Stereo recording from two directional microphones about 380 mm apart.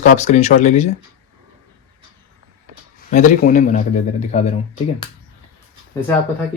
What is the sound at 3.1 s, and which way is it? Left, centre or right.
A man's voice, centre.